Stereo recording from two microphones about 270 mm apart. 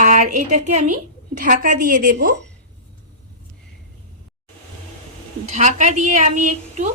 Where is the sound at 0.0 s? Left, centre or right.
Right.